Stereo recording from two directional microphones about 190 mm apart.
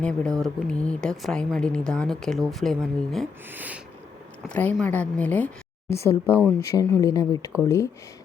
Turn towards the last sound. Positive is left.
turn(degrees=15)  # may be behind; listen again after turning